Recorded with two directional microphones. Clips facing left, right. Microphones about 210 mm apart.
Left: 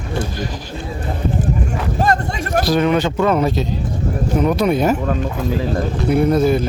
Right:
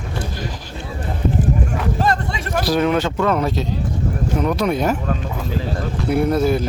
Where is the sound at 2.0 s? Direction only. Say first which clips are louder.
Left 5 dB; 45° left (ahead or behind).